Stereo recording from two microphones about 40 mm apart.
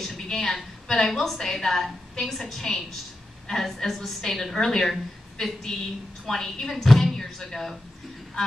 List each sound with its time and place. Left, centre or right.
0.0 s a woman's voice: centre